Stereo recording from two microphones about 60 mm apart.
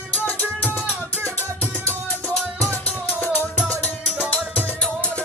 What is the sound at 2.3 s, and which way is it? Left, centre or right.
Music, centre.